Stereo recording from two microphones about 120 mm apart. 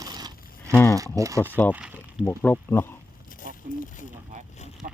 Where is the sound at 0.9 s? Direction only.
30° right (ahead or behind).